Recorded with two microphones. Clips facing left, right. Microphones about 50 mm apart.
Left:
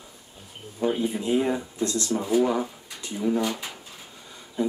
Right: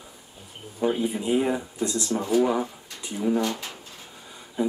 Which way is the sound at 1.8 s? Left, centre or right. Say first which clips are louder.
Even; centre.